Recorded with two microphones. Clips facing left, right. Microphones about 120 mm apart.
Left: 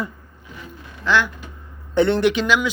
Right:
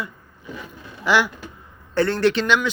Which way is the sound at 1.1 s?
10° right (ahead or behind).